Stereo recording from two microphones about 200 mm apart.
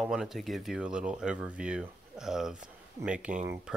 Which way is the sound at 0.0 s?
Centre (ahead or behind).